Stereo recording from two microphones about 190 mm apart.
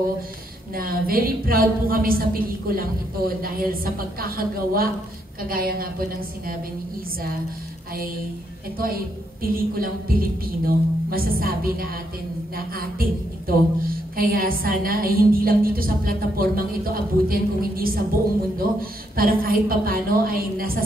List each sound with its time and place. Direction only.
0.7 s a woman's voice: 50° right (ahead or behind)
8.7 s a woman's voice: 50° right (ahead or behind)